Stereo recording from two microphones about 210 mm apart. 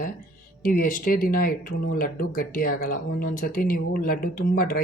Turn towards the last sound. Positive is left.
turn(degrees=45)  # may be behind; listen again after turning